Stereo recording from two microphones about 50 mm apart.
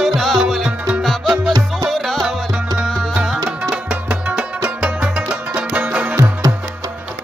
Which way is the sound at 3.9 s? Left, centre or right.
Right.